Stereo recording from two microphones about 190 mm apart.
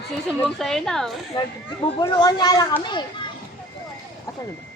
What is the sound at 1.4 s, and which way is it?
Speech, 25° left (ahead or behind).